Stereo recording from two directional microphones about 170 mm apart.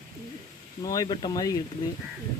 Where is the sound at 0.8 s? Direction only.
20° left (ahead or behind).